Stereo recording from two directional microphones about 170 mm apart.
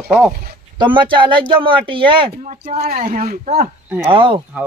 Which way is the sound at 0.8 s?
30° right (ahead or behind).